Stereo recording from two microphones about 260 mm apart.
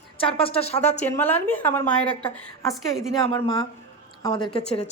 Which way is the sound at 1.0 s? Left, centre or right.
Centre.